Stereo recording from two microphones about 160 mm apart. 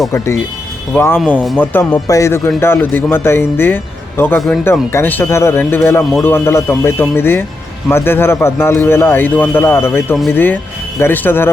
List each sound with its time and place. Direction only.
0.9 s a man's voice: 15° left (ahead or behind)
4.4 s speech: centre (ahead or behind)
4.6 s a man's voice: 15° left (ahead or behind)